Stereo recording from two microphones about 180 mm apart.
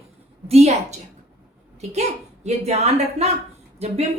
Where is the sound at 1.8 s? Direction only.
35° right (ahead or behind).